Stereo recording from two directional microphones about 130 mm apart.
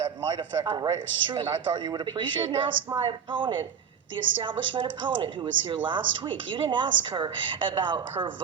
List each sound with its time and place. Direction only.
0.0 s speech: 40° right (ahead or behind)